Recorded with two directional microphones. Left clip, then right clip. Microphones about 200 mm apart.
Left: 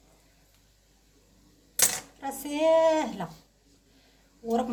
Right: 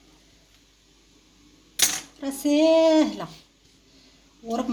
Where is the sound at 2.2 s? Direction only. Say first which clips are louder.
Right 7 dB; 35° right (ahead or behind).